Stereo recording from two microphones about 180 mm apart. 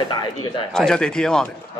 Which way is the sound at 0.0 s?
25° left (ahead or behind).